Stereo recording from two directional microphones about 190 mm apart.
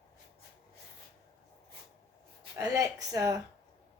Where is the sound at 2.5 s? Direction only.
15° right (ahead or behind).